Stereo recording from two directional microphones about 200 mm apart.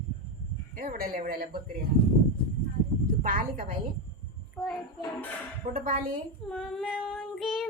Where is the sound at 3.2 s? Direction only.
45° right (ahead or behind).